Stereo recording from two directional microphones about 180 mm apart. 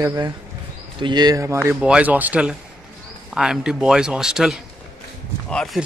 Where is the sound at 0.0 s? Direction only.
20° right (ahead or behind); by 5.9 s centre (ahead or behind).